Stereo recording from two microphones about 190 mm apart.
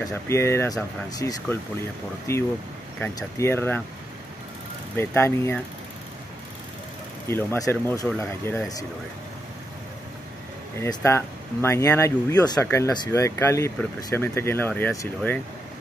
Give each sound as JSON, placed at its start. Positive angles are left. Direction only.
{"t": 0.0, "sound": "speech", "side_deg": 15}
{"t": 4.9, "sound": "speech", "side_deg": 15}
{"t": 7.2, "sound": "speech", "side_deg": 15}
{"t": 10.8, "sound": "speech", "side_deg": 15}